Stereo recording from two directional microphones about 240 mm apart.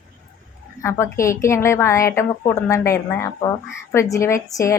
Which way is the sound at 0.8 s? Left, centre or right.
Centre.